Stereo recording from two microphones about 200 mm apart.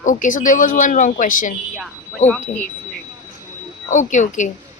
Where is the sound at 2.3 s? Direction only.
5° left (ahead or behind).